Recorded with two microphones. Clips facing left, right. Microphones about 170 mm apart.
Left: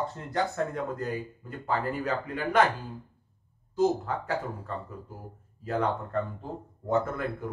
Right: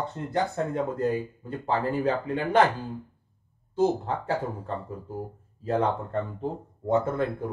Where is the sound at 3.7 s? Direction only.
30° right (ahead or behind).